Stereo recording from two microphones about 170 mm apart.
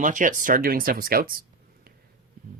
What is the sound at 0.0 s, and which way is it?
Speech, 50° right (ahead or behind).